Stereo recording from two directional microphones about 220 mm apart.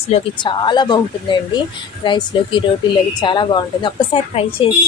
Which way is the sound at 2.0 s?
20° left (ahead or behind).